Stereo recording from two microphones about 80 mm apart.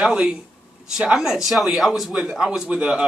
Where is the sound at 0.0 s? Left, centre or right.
Centre.